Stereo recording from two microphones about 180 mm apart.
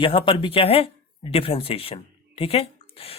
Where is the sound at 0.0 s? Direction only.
30° left (ahead or behind).